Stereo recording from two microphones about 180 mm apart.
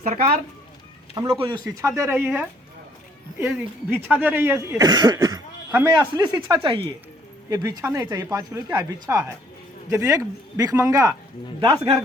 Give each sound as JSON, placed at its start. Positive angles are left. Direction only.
{"t": 0.0, "sound": "speech", "side_deg": -40}
{"t": 1.1, "sound": "speech", "side_deg": -20}
{"t": 11.6, "sound": "speech", "side_deg": -30}